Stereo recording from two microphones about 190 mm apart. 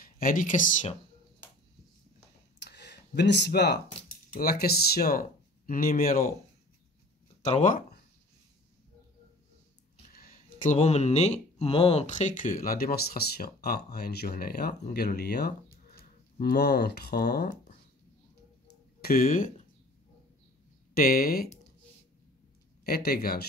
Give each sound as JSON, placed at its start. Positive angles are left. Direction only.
{"t": 0.2, "sound": "speech", "side_deg": 45}
{"t": 2.6, "sound": "a sound", "side_deg": 65}
{"t": 4.3, "sound": "speech", "side_deg": 55}
{"t": 7.4, "sound": "speech", "side_deg": 40}
{"t": 10.1, "sound": "speech", "side_deg": 45}
{"t": 18.9, "sound": "speech", "side_deg": 50}
{"t": 20.9, "sound": "speech", "side_deg": 50}
{"t": 22.8, "sound": "speech", "side_deg": 55}